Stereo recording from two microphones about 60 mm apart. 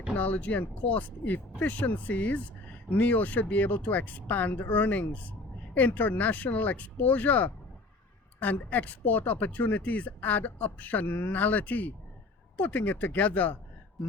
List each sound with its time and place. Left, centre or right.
0.2 s speech: left